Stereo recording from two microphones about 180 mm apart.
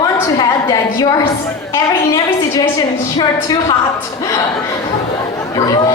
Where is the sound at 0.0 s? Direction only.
20° left (ahead or behind).